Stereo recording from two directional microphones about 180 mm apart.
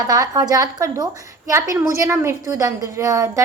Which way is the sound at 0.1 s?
20° right (ahead or behind).